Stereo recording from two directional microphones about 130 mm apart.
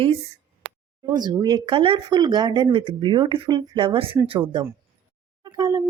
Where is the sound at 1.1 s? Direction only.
30° right (ahead or behind).